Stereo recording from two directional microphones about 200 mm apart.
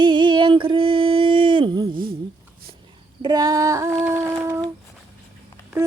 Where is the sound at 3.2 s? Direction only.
20° right (ahead or behind).